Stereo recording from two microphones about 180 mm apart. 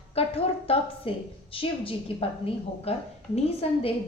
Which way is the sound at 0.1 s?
35° left (ahead or behind).